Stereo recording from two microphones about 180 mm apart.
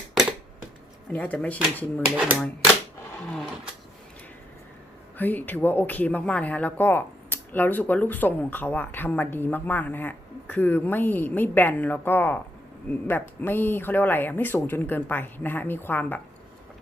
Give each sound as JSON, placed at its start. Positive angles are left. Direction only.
{"t": 0.1, "sound": "a sound", "side_deg": 0}
{"t": 1.1, "sound": "speech", "side_deg": 5}
{"t": 2.0, "sound": "speech", "side_deg": -5}
{"t": 5.1, "sound": "speech", "side_deg": 10}